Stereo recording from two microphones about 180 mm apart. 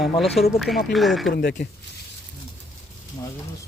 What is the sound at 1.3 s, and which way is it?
Speech, 65° left (ahead or behind).